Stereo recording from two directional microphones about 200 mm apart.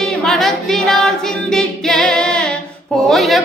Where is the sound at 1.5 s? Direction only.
5° left (ahead or behind).